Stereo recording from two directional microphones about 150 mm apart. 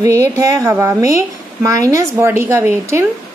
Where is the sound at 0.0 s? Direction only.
20° right (ahead or behind).